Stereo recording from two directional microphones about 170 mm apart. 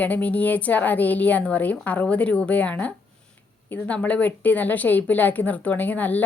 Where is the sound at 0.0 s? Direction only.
10° left (ahead or behind).